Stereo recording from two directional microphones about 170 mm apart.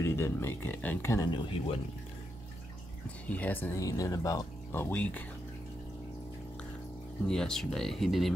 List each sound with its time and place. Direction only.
0.0 s speech: 15° left (ahead or behind)
1.3 s speech: 35° left (ahead or behind)
3.3 s speech: 10° left (ahead or behind)
7.2 s speech: 5° left (ahead or behind)